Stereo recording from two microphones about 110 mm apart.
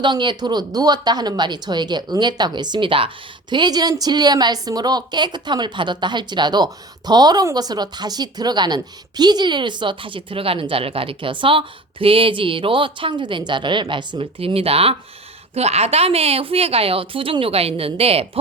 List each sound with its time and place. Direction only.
0.0 s speech: 45° right (ahead or behind)
3.5 s a woman's voice: 40° right (ahead or behind); by 18.3 s 65° right (ahead or behind)